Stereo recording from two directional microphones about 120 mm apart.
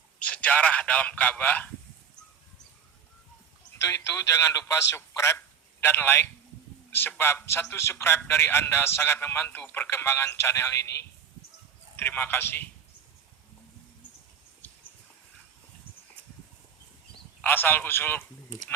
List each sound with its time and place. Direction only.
0.2 s a man's voice: 10° left (ahead or behind)
3.8 s a man's voice: 25° left (ahead or behind)
17.4 s a man's voice: 15° left (ahead or behind)